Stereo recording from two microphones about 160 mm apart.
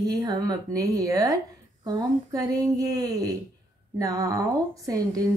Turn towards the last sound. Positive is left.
turn(degrees=-20)  # may be behind; listen again after turning